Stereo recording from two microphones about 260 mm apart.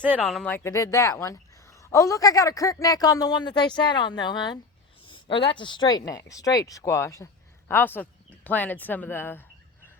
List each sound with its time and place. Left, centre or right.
0.0 s speech: centre